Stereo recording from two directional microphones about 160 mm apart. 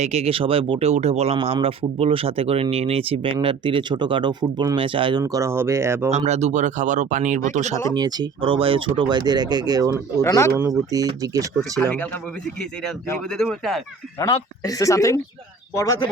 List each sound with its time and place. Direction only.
0.0 s speech: 40° right (ahead or behind)
5.2 s speech: 20° right (ahead or behind)
6.1 s speech: 45° right (ahead or behind)
7.9 s speech: 25° right (ahead or behind)
10.2 s speech: 20° left (ahead or behind)
10.9 s speech: 20° right (ahead or behind)
13.3 s speech: centre (ahead or behind)
14.6 s speech: 20° left (ahead or behind)